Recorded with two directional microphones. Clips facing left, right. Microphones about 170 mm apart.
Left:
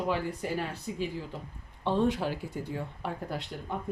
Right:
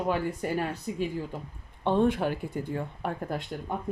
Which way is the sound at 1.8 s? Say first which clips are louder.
Right 3 dB; 55° right (ahead or behind).